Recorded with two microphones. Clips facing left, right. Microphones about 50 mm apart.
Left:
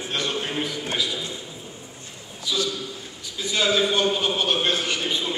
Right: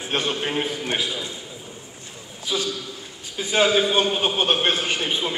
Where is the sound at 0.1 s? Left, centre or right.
Right.